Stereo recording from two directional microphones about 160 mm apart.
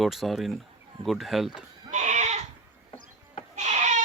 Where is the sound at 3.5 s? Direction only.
45° right (ahead or behind).